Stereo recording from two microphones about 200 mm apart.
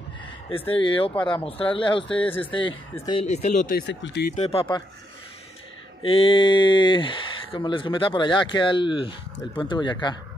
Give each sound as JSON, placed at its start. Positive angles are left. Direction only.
{"t": 0.5, "sound": "speech", "side_deg": 25}
{"t": 4.4, "sound": "speech", "side_deg": 30}
{"t": 6.0, "sound": "speech", "side_deg": 25}